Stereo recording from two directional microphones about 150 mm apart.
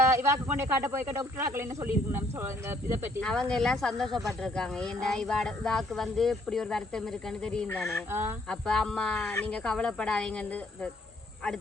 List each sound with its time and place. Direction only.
0.1 s speech: 20° right (ahead or behind)
3.2 s speech: 5° left (ahead or behind)
8.1 s speech: 15° right (ahead or behind)
8.4 s speech: 5° left (ahead or behind)